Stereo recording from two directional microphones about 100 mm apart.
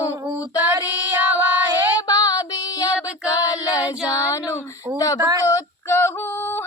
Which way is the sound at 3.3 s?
35° left (ahead or behind).